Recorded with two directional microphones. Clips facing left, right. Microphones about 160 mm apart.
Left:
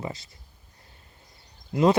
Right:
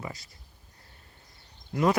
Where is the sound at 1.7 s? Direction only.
25° left (ahead or behind).